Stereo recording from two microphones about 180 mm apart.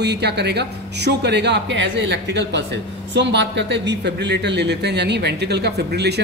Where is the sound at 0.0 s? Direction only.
70° right (ahead or behind).